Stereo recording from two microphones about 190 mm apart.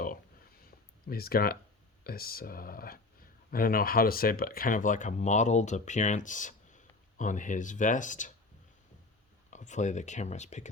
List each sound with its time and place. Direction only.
0.0 s a sound: 50° left (ahead or behind)
2.0 s speech: 50° left (ahead or behind)
9.5 s speech: 40° left (ahead or behind)